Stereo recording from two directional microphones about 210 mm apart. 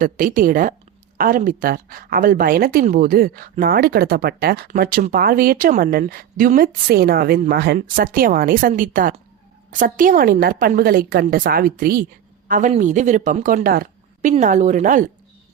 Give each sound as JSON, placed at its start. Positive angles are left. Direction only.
{"t": 0.0, "sound": "a woman's voice", "side_deg": -40}